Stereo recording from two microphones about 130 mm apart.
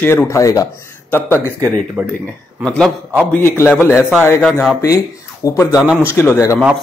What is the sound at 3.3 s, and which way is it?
Speech, 20° left (ahead or behind).